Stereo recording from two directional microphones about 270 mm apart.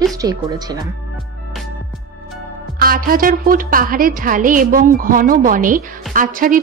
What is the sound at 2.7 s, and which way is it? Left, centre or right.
A woman's voice, right.